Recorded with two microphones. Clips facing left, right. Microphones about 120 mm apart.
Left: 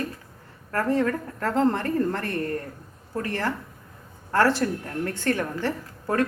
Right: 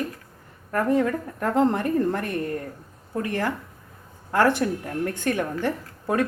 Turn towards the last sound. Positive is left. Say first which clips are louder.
# right 1 dB
turn(degrees=-15)  # may be behind; listen again after turning